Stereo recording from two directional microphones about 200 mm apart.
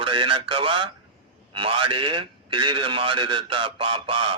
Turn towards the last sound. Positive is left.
turn(degrees=-25)  # may be behind; listen again after turning